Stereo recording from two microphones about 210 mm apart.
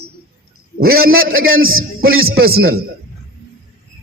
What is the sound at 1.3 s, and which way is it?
Speech, 75° right (ahead or behind).